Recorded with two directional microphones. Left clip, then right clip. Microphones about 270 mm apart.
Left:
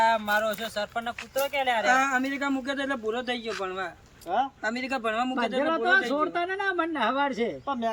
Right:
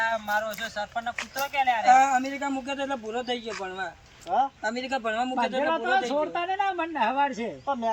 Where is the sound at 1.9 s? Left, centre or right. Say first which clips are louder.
Right 6 dB; centre.